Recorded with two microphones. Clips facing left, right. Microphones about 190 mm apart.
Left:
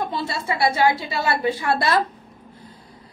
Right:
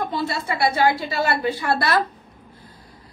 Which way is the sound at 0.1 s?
25° left (ahead or behind).